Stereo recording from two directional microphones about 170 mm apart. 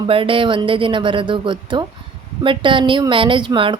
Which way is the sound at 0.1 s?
30° right (ahead or behind).